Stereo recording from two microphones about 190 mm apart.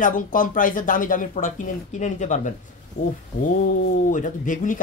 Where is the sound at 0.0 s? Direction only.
45° left (ahead or behind).